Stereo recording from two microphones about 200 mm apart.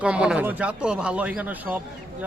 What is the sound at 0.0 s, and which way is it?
Speech, 5° right (ahead or behind).